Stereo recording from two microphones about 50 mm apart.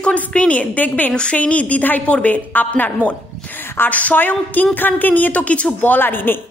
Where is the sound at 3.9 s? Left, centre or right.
Left.